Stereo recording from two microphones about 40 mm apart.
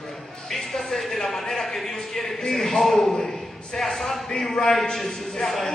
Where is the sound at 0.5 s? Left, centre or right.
Centre.